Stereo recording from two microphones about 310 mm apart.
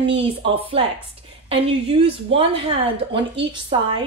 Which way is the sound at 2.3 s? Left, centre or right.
Centre.